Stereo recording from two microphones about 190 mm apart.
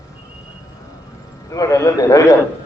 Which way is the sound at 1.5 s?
15° left (ahead or behind).